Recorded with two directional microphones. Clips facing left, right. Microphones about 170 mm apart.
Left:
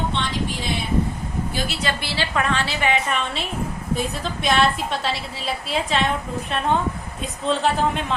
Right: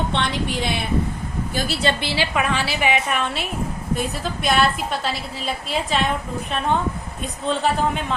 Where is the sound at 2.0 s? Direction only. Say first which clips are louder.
Right 2 dB; 15° right (ahead or behind).